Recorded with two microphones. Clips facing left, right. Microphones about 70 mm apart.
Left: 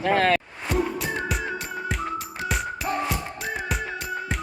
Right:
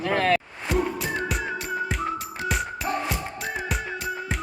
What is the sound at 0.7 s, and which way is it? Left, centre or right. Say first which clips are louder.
Music: even; centre.